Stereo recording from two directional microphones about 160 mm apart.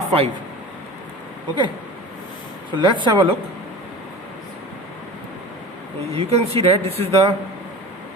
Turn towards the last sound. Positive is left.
turn(degrees=-35)  # may be behind; listen again after turning